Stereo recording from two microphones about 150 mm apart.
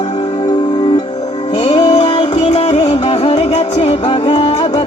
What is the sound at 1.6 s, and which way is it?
Music, 35° left (ahead or behind).